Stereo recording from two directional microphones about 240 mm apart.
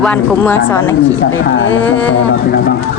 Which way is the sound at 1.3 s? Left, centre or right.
Left.